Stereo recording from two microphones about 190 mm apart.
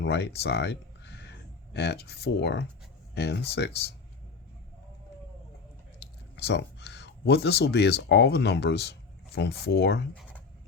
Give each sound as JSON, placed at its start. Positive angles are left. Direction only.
{"t": 0.0, "sound": "speech", "side_deg": 60}
{"t": 6.3, "sound": "speech", "side_deg": 65}
{"t": 10.2, "sound": "a sound", "side_deg": 10}